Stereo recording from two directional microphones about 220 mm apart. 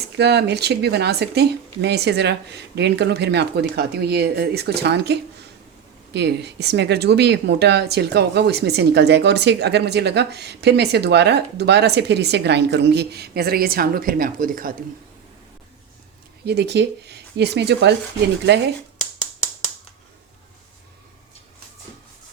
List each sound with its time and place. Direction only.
0.0 s speech: 50° right (ahead or behind)
6.1 s speech: 50° right (ahead or behind)
16.5 s speech: 50° right (ahead or behind)